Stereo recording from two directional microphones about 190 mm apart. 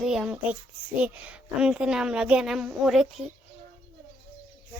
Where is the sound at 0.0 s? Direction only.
5° right (ahead or behind).